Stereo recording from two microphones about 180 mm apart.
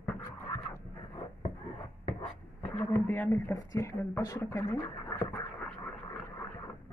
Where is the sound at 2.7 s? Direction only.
10° left (ahead or behind).